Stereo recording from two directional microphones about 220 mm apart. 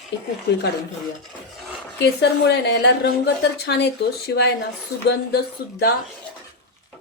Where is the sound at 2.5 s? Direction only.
50° left (ahead or behind).